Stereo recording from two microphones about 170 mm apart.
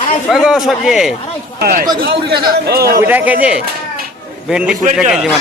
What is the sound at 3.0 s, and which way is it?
A man's voice, 10° right (ahead or behind).